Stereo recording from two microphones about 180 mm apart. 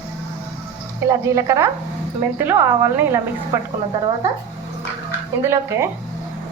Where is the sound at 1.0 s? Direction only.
15° right (ahead or behind).